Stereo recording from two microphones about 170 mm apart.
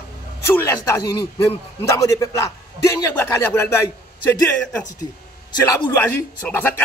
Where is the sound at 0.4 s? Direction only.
15° left (ahead or behind).